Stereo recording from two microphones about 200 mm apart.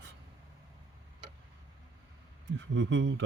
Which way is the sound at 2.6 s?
65° right (ahead or behind).